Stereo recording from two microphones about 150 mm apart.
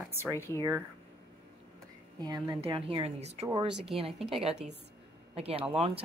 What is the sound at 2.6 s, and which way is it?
Speech, 40° right (ahead or behind).